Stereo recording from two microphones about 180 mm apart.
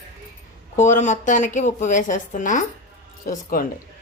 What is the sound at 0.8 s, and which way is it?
A woman's voice, 45° left (ahead or behind).